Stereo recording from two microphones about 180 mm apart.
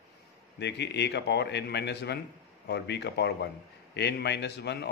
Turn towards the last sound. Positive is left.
turn(degrees=70)  # may be behind; listen again after turning